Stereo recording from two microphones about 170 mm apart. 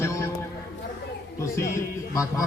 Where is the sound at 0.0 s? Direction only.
15° left (ahead or behind).